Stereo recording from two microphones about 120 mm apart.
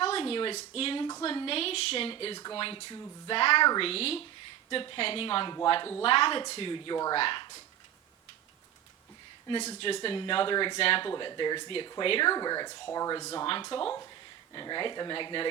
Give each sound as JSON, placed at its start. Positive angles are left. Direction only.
{"t": 0.0, "sound": "a sound", "side_deg": 50}
{"t": 0.8, "sound": "speech", "side_deg": 50}
{"t": 9.8, "sound": "speech", "side_deg": 50}
{"t": 10.8, "sound": "speech", "side_deg": 50}
{"t": 11.2, "sound": "speech", "side_deg": 40}
{"t": 12.3, "sound": "speech", "side_deg": 35}